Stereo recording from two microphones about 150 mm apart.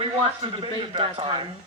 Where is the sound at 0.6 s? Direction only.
35° right (ahead or behind).